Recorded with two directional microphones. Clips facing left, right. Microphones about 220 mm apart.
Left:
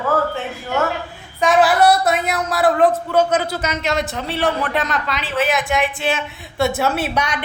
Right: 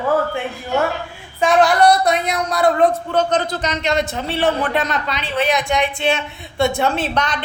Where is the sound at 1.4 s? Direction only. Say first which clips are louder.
Even; centre (ahead or behind).